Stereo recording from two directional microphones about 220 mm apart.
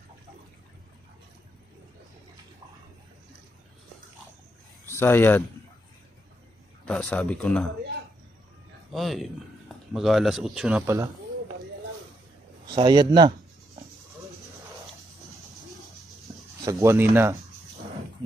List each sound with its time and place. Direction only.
4.8 s speech: 10° left (ahead or behind)
6.9 s speech: 5° left (ahead or behind)
8.9 s speech: centre (ahead or behind)
12.6 s a man's voice: 20° right (ahead or behind)
16.8 s speech: 10° right (ahead or behind)